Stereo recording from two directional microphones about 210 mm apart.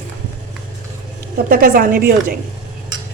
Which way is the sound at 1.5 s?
40° right (ahead or behind).